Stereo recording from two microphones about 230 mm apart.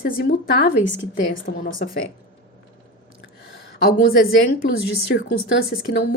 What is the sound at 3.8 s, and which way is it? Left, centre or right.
A woman's voice, left.